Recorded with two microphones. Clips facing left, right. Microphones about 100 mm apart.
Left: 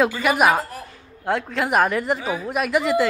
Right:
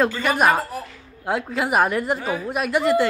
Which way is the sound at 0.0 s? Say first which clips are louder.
Left 1 dB; 5° left (ahead or behind).